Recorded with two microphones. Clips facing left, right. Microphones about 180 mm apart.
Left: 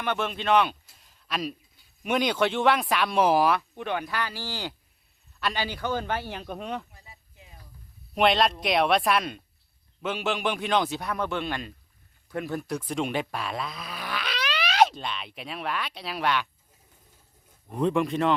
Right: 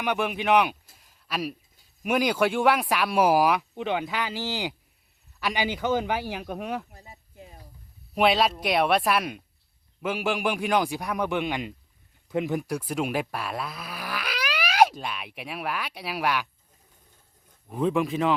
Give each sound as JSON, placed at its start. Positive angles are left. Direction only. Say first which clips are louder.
{"t": 0.0, "sound": "speech", "louder": "right 2 dB", "side_deg": -15}
{"t": 6.9, "sound": "a sound", "louder": "right 6 dB", "side_deg": -40}
{"t": 8.1, "sound": "speech", "louder": "even", "side_deg": -5}
{"t": 17.7, "sound": "speech", "louder": "even", "side_deg": 0}